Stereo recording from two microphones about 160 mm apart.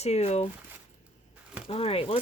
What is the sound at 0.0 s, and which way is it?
Speech, 40° left (ahead or behind).